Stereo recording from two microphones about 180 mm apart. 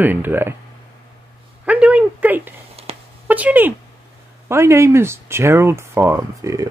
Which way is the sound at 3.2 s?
10° right (ahead or behind).